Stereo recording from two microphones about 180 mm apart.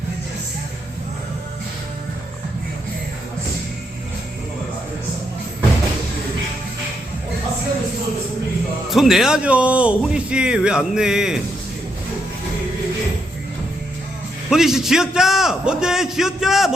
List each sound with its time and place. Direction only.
8.9 s speech: centre (ahead or behind)
14.5 s speech: centre (ahead or behind)